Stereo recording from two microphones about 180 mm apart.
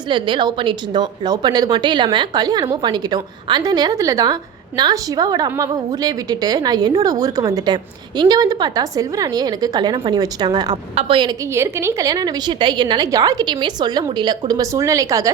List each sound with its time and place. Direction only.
0.1 s a woman's voice: 25° right (ahead or behind)
11.5 s a woman's voice: 15° right (ahead or behind)